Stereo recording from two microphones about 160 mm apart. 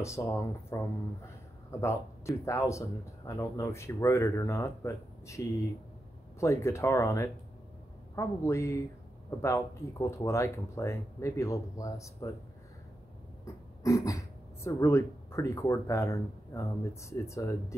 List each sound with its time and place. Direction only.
0.0 s speech: 20° left (ahead or behind)
13.8 s speech: 20° left (ahead or behind)